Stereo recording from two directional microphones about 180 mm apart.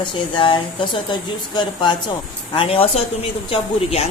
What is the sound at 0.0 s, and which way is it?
A woman's voice, 30° left (ahead or behind).